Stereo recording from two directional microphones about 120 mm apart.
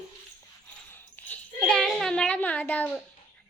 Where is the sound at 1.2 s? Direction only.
15° left (ahead or behind).